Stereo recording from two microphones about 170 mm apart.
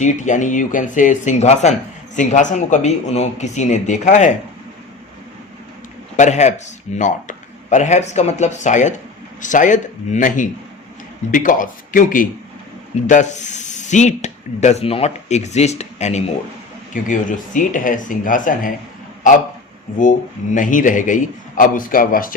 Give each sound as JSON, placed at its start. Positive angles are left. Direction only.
{"t": 0.0, "sound": "a man's voice", "side_deg": 45}
{"t": 6.1, "sound": "a man's voice", "side_deg": 45}
{"t": 20.0, "sound": "a man's voice", "side_deg": 50}